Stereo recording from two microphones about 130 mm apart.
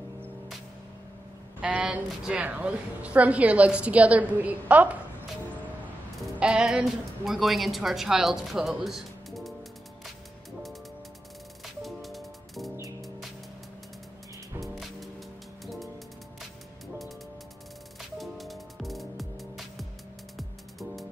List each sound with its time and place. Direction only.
1.6 s a woman's voice: 10° right (ahead or behind)
6.2 s a woman's voice: 5° right (ahead or behind)
11.6 s music: centre (ahead or behind)
14.6 s music: centre (ahead or behind)
18.1 s music: centre (ahead or behind)